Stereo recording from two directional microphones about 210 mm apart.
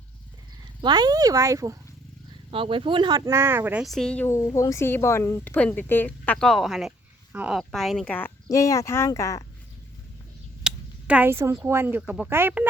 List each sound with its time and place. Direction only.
0.8 s speech: 20° right (ahead or behind); by 9.4 s 15° left (ahead or behind)
10.6 s speech: 5° right (ahead or behind)